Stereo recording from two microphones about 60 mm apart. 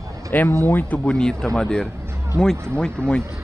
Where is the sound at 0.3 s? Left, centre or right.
Left.